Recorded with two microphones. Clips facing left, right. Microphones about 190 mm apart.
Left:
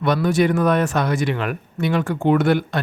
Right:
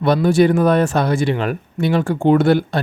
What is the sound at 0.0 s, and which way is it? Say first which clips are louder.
Speech: right 4 dB; 30° right (ahead or behind).